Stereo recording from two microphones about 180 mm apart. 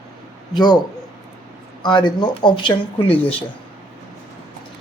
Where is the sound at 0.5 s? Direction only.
25° left (ahead or behind).